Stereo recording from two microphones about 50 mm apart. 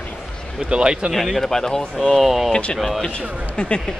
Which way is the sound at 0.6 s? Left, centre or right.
Centre.